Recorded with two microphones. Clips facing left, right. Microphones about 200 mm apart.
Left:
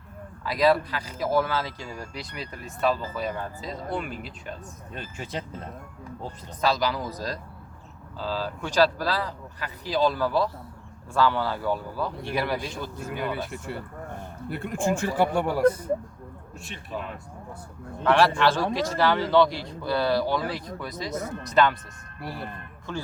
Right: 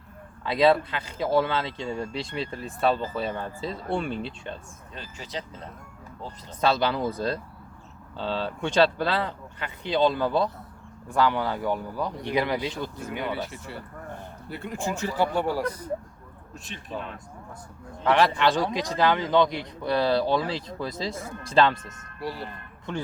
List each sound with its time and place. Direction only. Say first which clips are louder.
0.4 s speech: right 1 dB; 25° right (ahead or behind)
4.9 s speech: left 2 dB; 55° left (ahead or behind)
6.6 s speech: right 2 dB; 25° right (ahead or behind)
14.5 s speech: left 5 dB; 50° left (ahead or behind)
18.3 s speech: left 1 dB; 15° right (ahead or behind)
22.2 s speech: right 3 dB; 55° left (ahead or behind)